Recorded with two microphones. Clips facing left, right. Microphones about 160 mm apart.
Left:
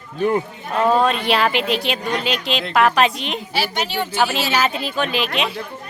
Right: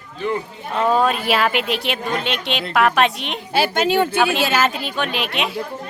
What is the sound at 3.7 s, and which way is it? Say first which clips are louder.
Speech: right 6 dB; 50° right (ahead or behind).